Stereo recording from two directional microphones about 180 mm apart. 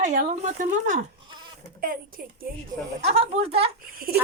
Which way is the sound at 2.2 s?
55° right (ahead or behind).